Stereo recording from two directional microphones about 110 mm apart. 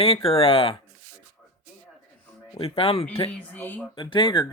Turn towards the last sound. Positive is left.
turn(degrees=45)  # may be behind; listen again after turning